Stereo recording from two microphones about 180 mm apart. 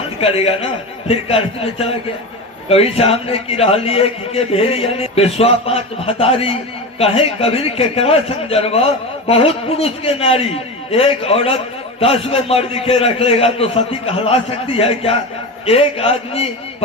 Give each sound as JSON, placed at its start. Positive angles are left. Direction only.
{"t": 0.2, "sound": "a man's voice", "side_deg": 35}